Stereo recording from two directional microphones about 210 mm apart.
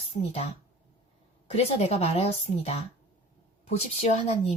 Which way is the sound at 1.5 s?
30° left (ahead or behind).